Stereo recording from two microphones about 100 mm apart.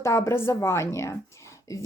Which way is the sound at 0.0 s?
30° left (ahead or behind).